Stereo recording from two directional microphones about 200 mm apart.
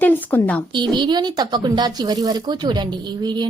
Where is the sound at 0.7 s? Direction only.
25° right (ahead or behind).